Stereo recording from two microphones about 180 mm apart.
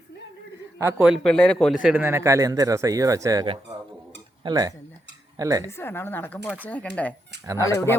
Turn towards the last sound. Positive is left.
turn(degrees=15)  # may be behind; listen again after turning